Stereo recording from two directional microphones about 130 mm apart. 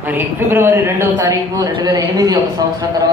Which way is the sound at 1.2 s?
30° right (ahead or behind).